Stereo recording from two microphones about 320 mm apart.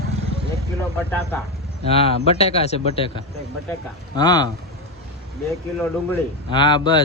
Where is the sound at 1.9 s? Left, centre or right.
Centre.